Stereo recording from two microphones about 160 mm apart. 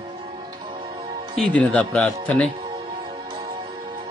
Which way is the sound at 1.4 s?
10° left (ahead or behind).